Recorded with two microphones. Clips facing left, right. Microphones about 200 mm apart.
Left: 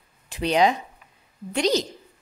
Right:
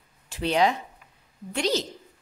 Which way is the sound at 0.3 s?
15° left (ahead or behind).